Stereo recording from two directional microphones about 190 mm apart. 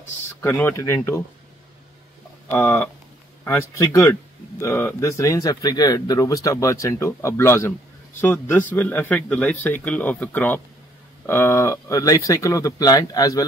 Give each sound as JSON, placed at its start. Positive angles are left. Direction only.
{"t": 0.4, "sound": "speech", "side_deg": 10}
{"t": 2.5, "sound": "speech", "side_deg": 10}